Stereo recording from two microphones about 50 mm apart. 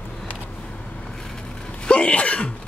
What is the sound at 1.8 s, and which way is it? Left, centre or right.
Sneeze, left.